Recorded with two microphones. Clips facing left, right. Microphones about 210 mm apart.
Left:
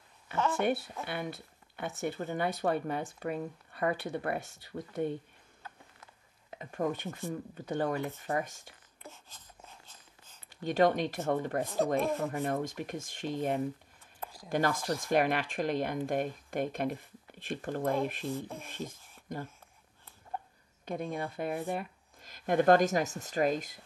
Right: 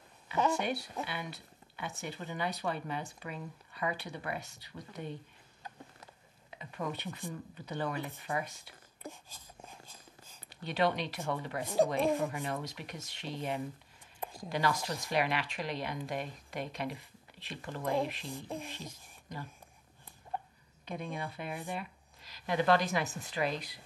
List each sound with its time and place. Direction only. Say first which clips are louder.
0.6 s speech: left 5 dB; 55° left (ahead or behind)
6.6 s speech: left 6 dB; 45° left (ahead or behind)
9.0 s a sound: right 4 dB; 15° right (ahead or behind)
10.5 s speech: left 5 dB; 45° left (ahead or behind)
11.6 s rub: right 1 dB; 15° right (ahead or behind)
12.4 s speech: left 6 dB; 50° left (ahead or behind)
14.2 s a sound: right 3 dB; 25° right (ahead or behind)
14.5 s speech: left 3 dB; 50° left (ahead or behind)
18.3 s rub: left 3 dB; 15° right (ahead or behind)
18.7 s speech: left 5 dB; 50° left (ahead or behind)
20.8 s speech: left 4 dB; 50° left (ahead or behind)